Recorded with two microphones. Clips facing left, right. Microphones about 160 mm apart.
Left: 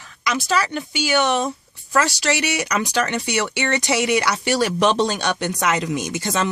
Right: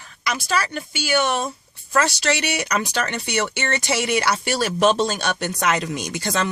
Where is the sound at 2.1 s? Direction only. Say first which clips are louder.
Left 1 dB; 15° left (ahead or behind).